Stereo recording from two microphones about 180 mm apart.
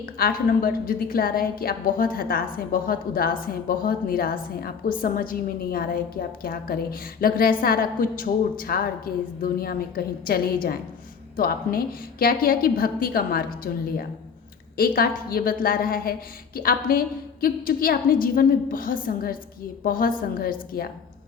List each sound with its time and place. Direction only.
0.0 s a woman's voice: 55° left (ahead or behind)